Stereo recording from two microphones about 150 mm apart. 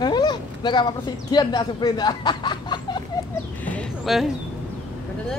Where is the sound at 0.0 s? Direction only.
30° left (ahead or behind).